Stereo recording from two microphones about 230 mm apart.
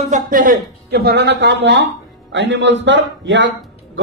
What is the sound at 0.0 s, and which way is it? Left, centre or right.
A man's voice, right.